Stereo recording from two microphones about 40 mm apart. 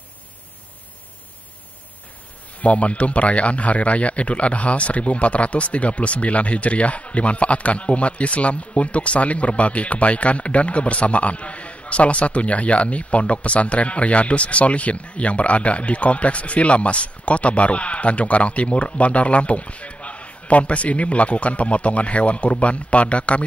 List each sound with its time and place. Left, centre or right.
2.6 s speech: left